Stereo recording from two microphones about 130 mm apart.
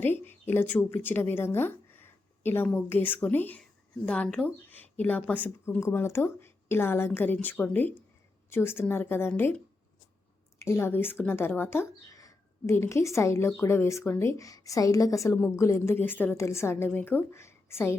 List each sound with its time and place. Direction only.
0.0 s a woman's voice: 15° left (ahead or behind)
10.6 s a woman's voice: 20° left (ahead or behind)